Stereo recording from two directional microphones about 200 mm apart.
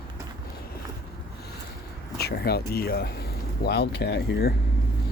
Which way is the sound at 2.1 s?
50° left (ahead or behind).